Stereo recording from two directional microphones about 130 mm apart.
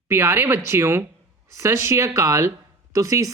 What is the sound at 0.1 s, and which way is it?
A woman's voice, 20° right (ahead or behind).